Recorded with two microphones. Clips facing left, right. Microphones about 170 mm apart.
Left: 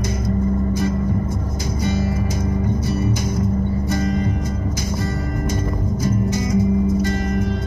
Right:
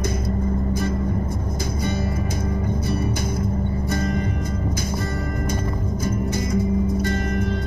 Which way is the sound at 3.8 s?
55° right (ahead or behind).